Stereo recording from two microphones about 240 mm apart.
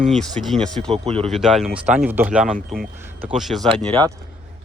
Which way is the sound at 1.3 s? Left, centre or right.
Centre.